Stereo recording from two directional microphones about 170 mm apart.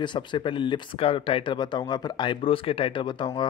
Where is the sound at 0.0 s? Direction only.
25° left (ahead or behind).